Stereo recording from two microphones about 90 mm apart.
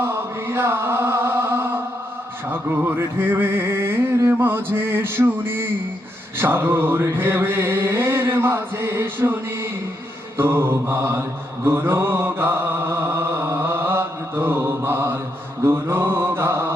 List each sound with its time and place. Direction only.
0.0 s chant: 30° right (ahead or behind)
2.5 s music: 25° right (ahead or behind)
11.6 s mantra: 30° right (ahead or behind)